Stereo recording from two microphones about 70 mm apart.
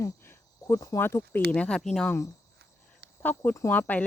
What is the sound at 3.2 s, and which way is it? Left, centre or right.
Speech, left.